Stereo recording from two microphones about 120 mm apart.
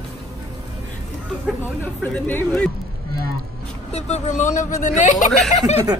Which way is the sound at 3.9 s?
70° left (ahead or behind).